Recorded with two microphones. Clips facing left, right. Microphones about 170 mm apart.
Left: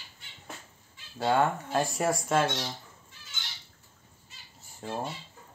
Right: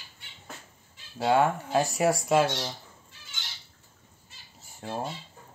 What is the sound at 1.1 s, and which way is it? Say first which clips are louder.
Speech: right 2 dB; 10° right (ahead or behind).